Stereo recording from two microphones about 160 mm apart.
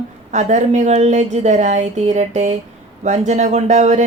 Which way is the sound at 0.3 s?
45° right (ahead or behind).